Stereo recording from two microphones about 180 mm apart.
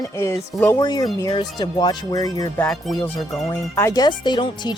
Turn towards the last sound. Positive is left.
turn(degrees=25)  # may be behind; listen again after turning